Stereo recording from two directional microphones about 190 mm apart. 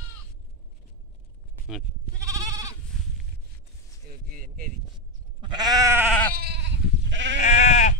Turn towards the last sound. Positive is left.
turn(degrees=40)  # may be behind; listen again after turning